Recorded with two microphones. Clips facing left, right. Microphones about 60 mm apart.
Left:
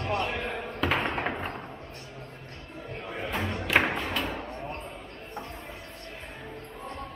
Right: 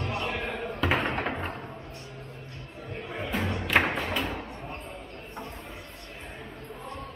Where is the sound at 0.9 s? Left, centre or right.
Centre.